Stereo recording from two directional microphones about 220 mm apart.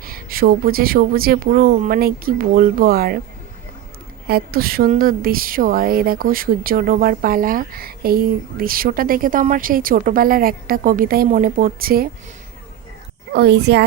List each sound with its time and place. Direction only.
0.0 s a woman's voice: 40° right (ahead or behind)
4.3 s a woman's voice: 45° right (ahead or behind)
13.3 s speech: 50° right (ahead or behind)